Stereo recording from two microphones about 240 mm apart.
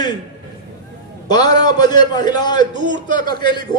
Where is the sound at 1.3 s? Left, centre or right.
Centre.